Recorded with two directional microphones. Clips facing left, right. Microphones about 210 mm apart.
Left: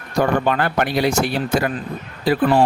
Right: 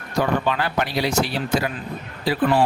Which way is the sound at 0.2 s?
50° left (ahead or behind).